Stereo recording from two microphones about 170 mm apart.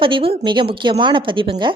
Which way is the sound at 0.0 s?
30° right (ahead or behind).